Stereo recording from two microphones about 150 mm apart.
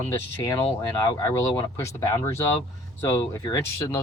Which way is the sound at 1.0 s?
20° left (ahead or behind).